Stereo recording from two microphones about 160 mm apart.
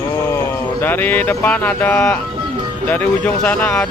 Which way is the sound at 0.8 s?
10° left (ahead or behind).